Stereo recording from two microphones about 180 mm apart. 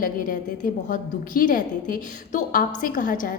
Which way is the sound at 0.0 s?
50° left (ahead or behind).